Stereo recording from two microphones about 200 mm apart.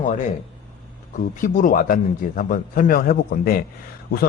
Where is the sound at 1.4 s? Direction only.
40° left (ahead or behind).